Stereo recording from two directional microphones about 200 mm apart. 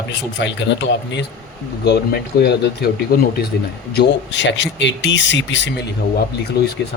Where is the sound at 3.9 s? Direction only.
65° left (ahead or behind).